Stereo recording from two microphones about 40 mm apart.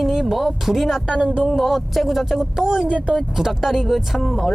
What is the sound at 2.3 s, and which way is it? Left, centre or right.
Speech, centre.